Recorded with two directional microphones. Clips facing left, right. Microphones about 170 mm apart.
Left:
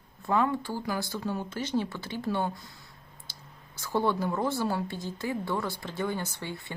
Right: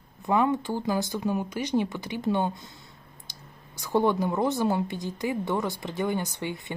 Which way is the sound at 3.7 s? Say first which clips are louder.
Right 4 dB; 15° right (ahead or behind).